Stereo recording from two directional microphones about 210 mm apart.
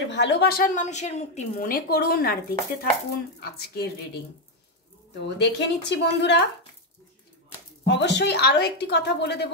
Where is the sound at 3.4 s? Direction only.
50° left (ahead or behind).